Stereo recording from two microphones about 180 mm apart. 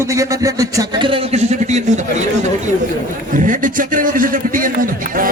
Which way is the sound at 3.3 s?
45° right (ahead or behind).